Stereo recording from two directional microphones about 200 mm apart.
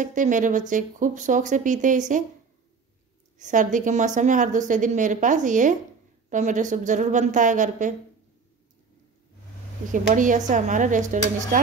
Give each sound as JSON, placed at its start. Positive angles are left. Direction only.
{"t": 0.0, "sound": "a woman's voice", "side_deg": -40}
{"t": 3.3, "sound": "a woman's voice", "side_deg": -40}
{"t": 10.1, "sound": "a woman's voice", "side_deg": -40}